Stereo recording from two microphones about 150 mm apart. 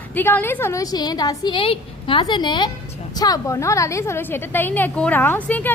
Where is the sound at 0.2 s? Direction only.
15° left (ahead or behind).